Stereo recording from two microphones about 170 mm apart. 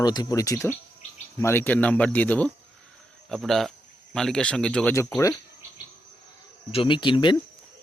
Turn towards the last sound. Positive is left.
turn(degrees=30)  # may be behind; listen again after turning